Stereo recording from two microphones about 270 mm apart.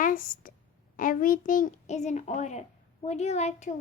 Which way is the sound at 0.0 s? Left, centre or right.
Left.